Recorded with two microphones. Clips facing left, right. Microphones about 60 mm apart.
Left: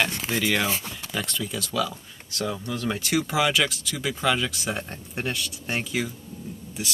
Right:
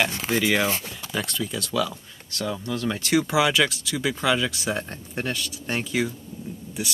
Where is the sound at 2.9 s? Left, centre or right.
Centre.